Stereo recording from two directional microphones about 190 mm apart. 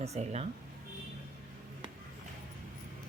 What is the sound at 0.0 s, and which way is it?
Speech, 35° right (ahead or behind).